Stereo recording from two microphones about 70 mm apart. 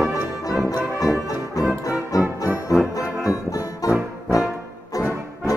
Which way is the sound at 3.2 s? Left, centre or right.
Left.